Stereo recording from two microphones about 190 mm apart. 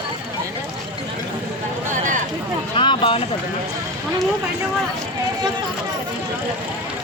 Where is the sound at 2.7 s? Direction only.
25° left (ahead or behind).